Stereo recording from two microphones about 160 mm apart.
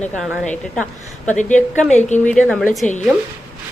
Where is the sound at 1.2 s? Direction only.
50° left (ahead or behind).